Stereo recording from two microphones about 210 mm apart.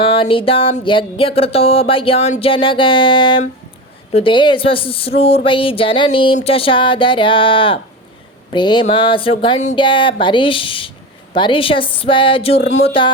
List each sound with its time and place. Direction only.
0.1 s speech: 25° left (ahead or behind)